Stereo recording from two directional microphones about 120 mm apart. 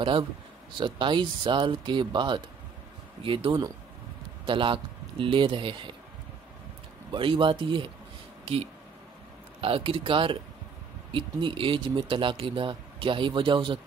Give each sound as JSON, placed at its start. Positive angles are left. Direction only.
{"t": 0.7, "sound": "speech", "side_deg": -40}
{"t": 7.1, "sound": "speech", "side_deg": -45}
{"t": 9.6, "sound": "speech", "side_deg": -50}